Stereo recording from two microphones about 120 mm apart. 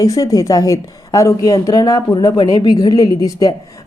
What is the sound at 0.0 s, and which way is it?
A woman's voice, 25° left (ahead or behind).